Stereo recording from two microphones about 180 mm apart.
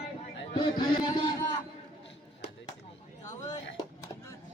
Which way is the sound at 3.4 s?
20° left (ahead or behind).